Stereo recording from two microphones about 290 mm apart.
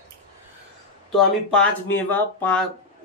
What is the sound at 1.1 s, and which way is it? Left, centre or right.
Speech, centre.